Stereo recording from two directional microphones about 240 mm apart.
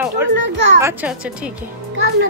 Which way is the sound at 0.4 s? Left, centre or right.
Right.